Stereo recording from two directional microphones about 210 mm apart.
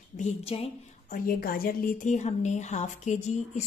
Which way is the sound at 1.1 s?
45° left (ahead or behind).